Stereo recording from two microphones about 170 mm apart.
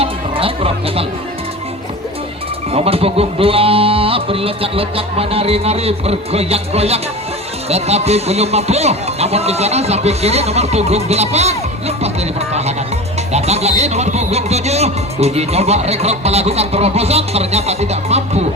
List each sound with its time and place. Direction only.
0.0 s music: 35° right (ahead or behind)
2.7 s speech: 35° right (ahead or behind)
13.3 s speech: 40° right (ahead or behind)